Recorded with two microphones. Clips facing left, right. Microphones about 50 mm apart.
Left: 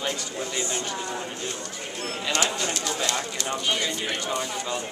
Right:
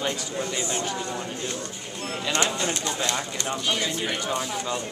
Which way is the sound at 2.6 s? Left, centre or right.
Centre.